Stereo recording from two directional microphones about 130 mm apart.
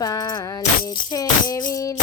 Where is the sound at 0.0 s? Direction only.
30° left (ahead or behind).